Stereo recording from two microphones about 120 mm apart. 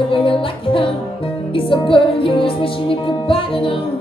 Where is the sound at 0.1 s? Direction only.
45° left (ahead or behind).